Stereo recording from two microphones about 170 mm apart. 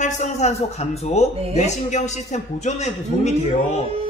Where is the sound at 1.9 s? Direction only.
45° left (ahead or behind).